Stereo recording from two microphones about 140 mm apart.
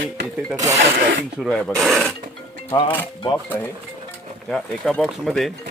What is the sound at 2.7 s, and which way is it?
Speech, 35° left (ahead or behind).